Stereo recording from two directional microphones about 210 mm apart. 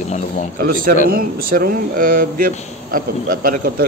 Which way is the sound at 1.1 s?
45° right (ahead or behind).